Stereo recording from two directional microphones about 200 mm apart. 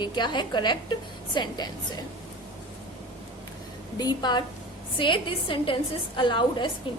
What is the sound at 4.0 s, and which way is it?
A woman's voice, 20° left (ahead or behind).